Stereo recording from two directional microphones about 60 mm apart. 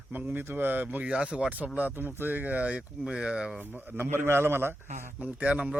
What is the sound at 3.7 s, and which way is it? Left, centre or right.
A man's voice, right.